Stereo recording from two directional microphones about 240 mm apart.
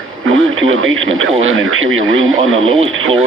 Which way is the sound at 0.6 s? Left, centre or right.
Right.